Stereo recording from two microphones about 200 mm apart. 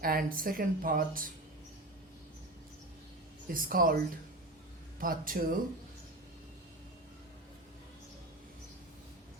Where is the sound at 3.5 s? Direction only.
45° right (ahead or behind).